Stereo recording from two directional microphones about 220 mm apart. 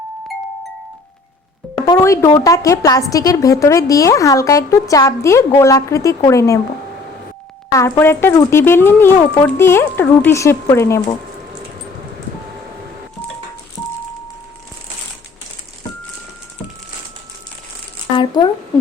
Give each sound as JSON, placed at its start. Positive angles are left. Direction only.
{"t": 1.9, "sound": "a woman's voice", "side_deg": 15}
{"t": 7.7, "sound": "a woman's voice", "side_deg": 15}
{"t": 18.2, "sound": "a sound", "side_deg": 20}